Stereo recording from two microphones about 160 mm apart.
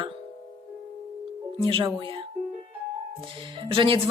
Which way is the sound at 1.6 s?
30° right (ahead or behind).